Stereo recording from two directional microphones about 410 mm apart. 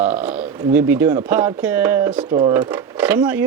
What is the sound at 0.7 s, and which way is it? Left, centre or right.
Speech, centre.